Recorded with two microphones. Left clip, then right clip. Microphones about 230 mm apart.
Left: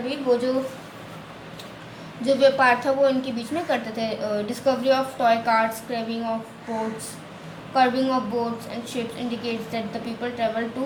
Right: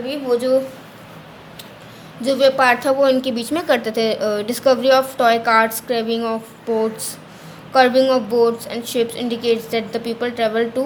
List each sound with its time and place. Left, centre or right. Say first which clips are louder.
0.1 s a woman's voice: right 3 dB; right
2.2 s a woman's voice: right 3 dB; right
7.7 s a woman's voice: right 7 dB; right